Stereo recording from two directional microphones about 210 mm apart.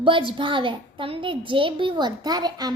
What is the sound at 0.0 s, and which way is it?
A woman's voice, 25° right (ahead or behind).